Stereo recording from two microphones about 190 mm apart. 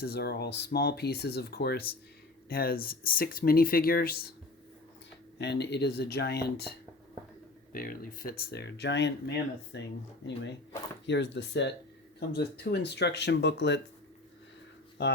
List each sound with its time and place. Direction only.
0.0 s speech: 55° left (ahead or behind)
5.4 s speech: 65° left (ahead or behind)
11.0 s speech: 65° left (ahead or behind)
15.0 s speech: 65° left (ahead or behind)